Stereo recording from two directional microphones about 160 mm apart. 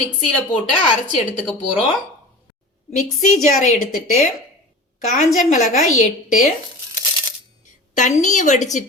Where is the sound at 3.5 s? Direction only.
55° left (ahead or behind).